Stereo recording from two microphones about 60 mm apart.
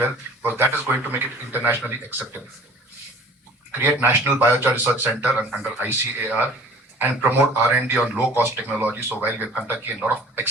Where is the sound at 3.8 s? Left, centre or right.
Right.